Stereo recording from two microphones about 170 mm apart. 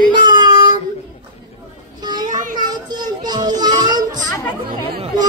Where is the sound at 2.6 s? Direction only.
25° right (ahead or behind).